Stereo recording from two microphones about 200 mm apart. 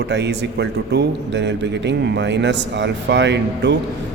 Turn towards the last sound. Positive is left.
turn(degrees=-60)  # may be behind; listen again after turning